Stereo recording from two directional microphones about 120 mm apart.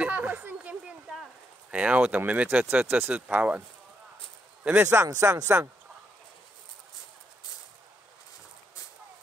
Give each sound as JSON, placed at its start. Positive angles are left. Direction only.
{"t": 0.0, "sound": "a sound", "side_deg": -15}
{"t": 1.7, "sound": "speech", "side_deg": -10}
{"t": 4.8, "sound": "speech", "side_deg": -25}